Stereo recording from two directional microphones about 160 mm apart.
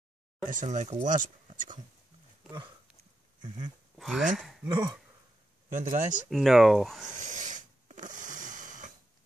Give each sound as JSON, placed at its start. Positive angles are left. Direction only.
{"t": 0.5, "sound": "speech", "side_deg": -50}
{"t": 3.3, "sound": "a sound", "side_deg": -30}
{"t": 3.9, "sound": "speech", "side_deg": 0}
{"t": 4.6, "sound": "speech", "side_deg": -25}
{"t": 5.7, "sound": "speech", "side_deg": -50}
{"t": 6.3, "sound": "speech", "side_deg": 0}
{"t": 7.2, "sound": "a sound", "side_deg": -50}